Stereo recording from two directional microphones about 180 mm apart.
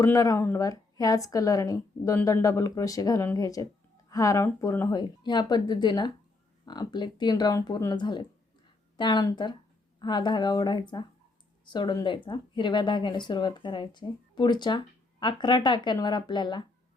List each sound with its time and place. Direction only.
0.0 s speech: 15° left (ahead or behind)